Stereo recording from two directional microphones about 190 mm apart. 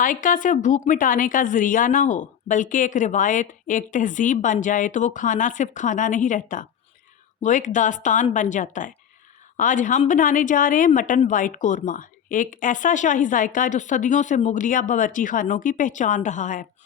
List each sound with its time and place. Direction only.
0.0 s a woman's voice: 45° left (ahead or behind)